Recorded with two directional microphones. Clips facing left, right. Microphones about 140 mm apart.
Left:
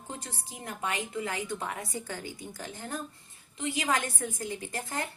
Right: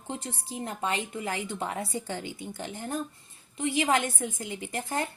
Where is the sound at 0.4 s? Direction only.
25° right (ahead or behind).